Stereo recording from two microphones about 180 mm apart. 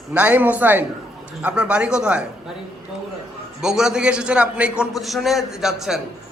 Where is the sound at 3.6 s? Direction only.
5° right (ahead or behind).